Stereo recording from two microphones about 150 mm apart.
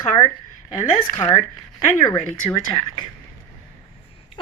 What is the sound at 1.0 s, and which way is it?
Speech, 35° left (ahead or behind).